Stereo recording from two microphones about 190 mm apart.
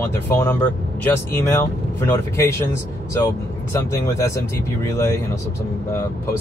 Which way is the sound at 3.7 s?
15° left (ahead or behind).